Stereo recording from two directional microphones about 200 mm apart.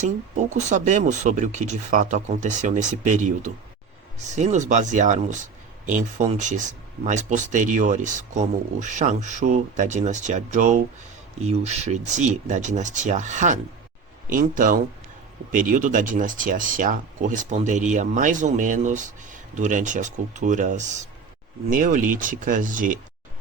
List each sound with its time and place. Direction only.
0.0 s speech: 35° right (ahead or behind)